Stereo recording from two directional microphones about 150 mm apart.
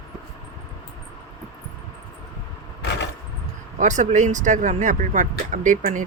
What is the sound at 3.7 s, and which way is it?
Speech, 55° right (ahead or behind).